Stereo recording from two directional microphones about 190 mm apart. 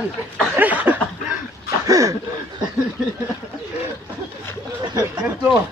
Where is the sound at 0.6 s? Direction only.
10° right (ahead or behind).